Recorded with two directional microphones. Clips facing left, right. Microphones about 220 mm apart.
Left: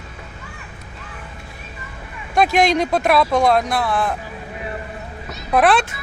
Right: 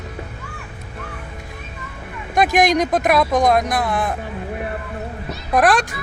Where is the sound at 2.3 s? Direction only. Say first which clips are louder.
Even; 15° right (ahead or behind).